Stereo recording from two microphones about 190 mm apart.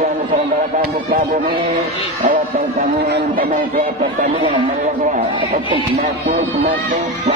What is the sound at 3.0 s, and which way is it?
Speech, 55° right (ahead or behind).